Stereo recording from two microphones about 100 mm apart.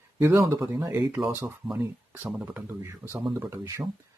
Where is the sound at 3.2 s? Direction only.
30° right (ahead or behind).